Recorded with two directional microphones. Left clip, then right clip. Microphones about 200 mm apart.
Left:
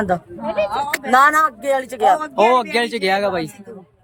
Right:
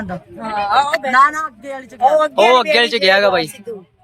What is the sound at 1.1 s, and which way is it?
Speech, 60° left (ahead or behind).